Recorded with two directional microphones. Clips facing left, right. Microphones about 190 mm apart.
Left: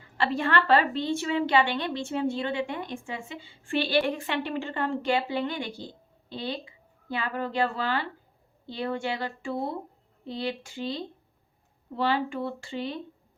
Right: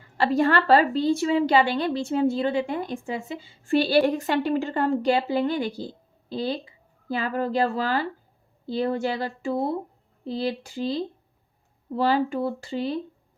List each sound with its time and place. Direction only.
0.2 s a woman's voice: 40° right (ahead or behind)